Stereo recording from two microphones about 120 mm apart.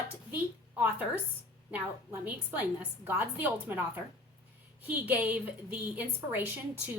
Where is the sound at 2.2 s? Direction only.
15° right (ahead or behind).